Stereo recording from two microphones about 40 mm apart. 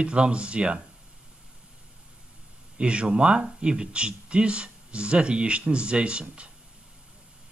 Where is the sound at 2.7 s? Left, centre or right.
Right.